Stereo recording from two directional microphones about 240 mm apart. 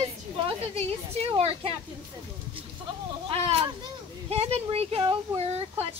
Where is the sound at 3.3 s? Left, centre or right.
Right.